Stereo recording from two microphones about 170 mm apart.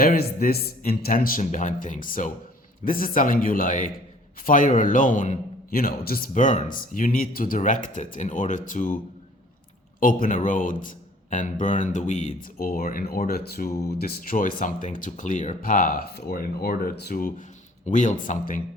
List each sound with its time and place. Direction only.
0.0 s a man's voice: 60° left (ahead or behind)
10.0 s a man's voice: 55° left (ahead or behind)
14.0 s a man's voice: 55° left (ahead or behind)